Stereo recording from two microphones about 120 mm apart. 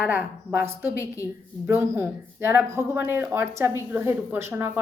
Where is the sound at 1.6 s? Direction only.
20° right (ahead or behind).